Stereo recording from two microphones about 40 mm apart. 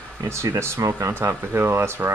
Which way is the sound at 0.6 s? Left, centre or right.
Right.